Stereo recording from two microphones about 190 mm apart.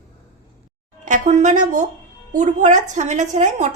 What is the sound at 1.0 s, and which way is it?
A woman's voice, 40° right (ahead or behind).